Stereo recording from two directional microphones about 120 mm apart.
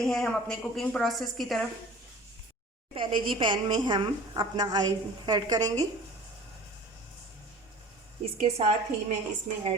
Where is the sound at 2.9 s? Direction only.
45° right (ahead or behind).